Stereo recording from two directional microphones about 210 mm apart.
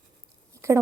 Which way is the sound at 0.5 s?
15° right (ahead or behind).